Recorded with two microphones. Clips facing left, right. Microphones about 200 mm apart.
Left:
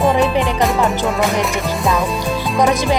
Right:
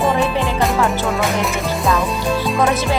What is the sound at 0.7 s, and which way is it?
Music, centre (ahead or behind).